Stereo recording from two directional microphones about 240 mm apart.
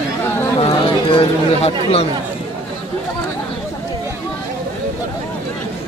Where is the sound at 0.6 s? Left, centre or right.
Left.